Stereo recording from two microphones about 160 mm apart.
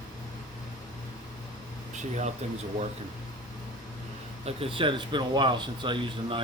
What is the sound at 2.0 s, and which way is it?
Speech, 45° right (ahead or behind).